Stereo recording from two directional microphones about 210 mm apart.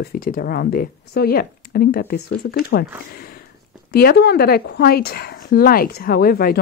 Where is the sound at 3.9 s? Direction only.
50° left (ahead or behind).